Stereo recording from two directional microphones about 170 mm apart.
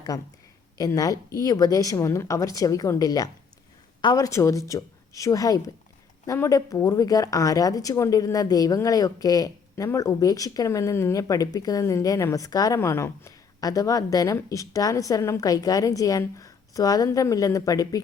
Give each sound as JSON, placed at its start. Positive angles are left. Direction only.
{"t": 0.8, "sound": "speech", "side_deg": 20}